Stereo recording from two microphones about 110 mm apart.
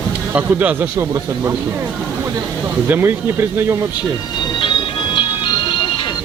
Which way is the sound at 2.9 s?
20° right (ahead or behind).